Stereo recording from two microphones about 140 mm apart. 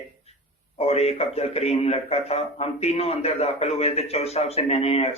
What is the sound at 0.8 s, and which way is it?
A man's voice, 45° left (ahead or behind).